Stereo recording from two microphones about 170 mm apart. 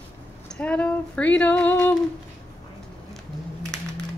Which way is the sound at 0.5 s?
5° left (ahead or behind).